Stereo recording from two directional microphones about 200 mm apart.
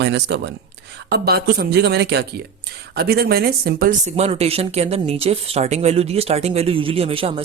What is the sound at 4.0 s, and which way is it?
A man's voice, 30° right (ahead or behind).